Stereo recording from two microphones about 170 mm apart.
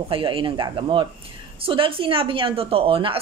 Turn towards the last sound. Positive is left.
turn(degrees=-30)  # may be behind; listen again after turning